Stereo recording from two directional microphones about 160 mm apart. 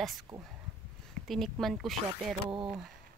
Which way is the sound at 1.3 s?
Centre (ahead or behind).